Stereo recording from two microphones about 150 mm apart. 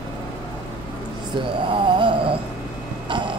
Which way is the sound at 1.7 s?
35° right (ahead or behind).